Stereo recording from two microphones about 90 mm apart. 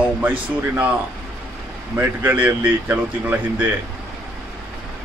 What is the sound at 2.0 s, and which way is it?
Speech, 25° right (ahead or behind).